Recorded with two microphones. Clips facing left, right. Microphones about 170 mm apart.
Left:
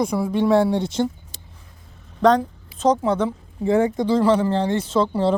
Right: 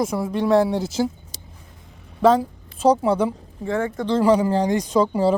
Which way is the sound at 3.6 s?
20° left (ahead or behind).